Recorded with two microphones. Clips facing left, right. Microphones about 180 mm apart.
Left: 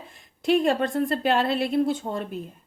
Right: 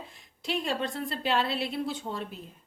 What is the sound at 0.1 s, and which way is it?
A woman's voice, 50° left (ahead or behind).